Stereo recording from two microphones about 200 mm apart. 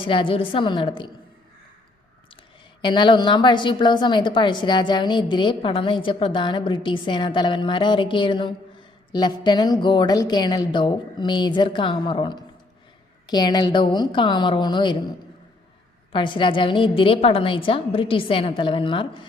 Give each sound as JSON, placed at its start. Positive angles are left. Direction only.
{"t": 0.0, "sound": "a woman's voice", "side_deg": 25}
{"t": 2.8, "sound": "a woman's voice", "side_deg": 25}
{"t": 16.1, "sound": "a woman's voice", "side_deg": 25}